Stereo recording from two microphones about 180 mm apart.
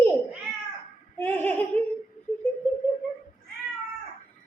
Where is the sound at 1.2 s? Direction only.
10° left (ahead or behind).